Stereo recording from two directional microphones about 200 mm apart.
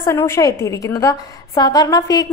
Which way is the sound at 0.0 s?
15° left (ahead or behind).